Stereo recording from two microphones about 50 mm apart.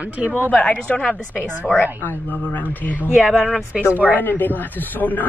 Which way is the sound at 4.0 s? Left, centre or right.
Left.